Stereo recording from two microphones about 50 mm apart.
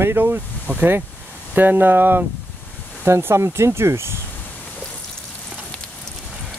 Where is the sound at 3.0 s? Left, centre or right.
Right.